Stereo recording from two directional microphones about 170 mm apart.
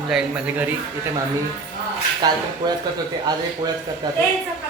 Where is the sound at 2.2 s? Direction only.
25° right (ahead or behind).